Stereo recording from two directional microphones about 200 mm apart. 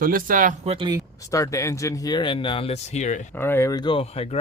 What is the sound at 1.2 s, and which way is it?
Speech, 15° left (ahead or behind).